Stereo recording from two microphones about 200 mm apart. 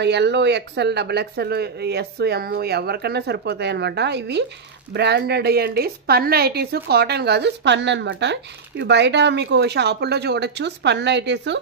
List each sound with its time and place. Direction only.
0.0 s a woman's voice: 60° right (ahead or behind)